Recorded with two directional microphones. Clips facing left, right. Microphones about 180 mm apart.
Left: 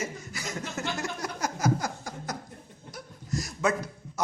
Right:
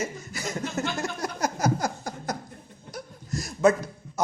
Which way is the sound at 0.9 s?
35° right (ahead or behind).